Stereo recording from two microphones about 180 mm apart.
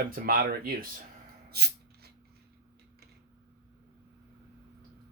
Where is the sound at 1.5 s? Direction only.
65° right (ahead or behind).